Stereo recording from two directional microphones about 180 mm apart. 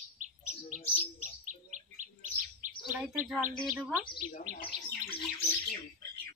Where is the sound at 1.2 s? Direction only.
45° right (ahead or behind).